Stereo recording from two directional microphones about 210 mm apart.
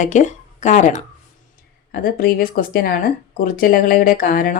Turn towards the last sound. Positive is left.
turn(degrees=40)  # may be behind; listen again after turning